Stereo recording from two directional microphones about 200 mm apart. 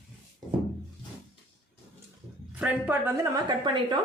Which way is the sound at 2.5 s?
5° right (ahead or behind).